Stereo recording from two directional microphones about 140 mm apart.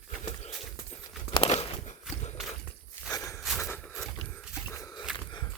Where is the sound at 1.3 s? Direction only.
45° left (ahead or behind).